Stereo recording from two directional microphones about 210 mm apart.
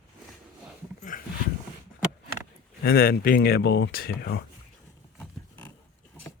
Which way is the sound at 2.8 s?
45° left (ahead or behind).